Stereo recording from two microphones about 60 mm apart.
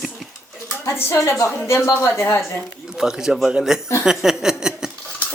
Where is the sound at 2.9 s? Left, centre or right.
Centre.